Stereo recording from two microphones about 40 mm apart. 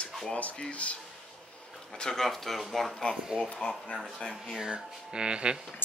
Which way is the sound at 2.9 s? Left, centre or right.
Left.